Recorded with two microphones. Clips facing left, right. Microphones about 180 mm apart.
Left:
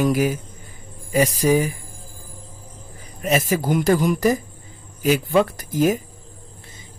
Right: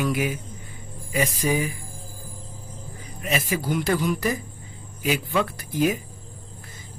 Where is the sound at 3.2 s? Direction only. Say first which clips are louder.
Left 6 dB; 40° left (ahead or behind).